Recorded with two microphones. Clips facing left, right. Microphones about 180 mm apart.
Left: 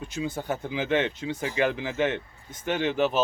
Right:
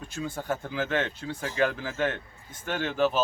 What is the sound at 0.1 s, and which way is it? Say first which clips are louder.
Speech: left 1 dB; 15° left (ahead or behind).